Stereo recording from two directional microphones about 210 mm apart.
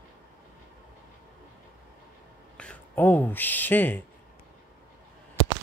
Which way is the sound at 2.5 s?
5° left (ahead or behind).